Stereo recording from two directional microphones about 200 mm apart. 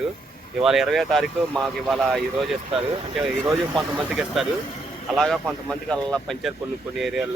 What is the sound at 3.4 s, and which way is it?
Speech, 15° right (ahead or behind).